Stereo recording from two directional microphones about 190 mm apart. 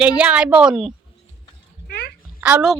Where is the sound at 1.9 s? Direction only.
60° left (ahead or behind).